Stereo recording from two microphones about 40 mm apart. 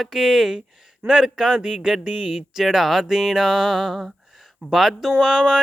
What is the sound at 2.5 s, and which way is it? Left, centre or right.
Speech, centre.